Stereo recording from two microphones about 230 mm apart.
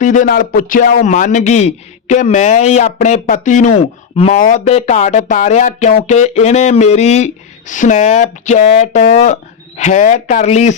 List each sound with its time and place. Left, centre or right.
0.0 s speech: left